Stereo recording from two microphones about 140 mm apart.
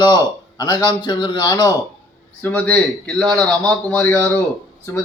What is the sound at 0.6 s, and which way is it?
A man's voice, 30° left (ahead or behind).